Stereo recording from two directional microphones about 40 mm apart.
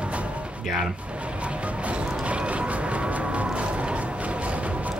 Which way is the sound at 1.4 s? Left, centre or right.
Right.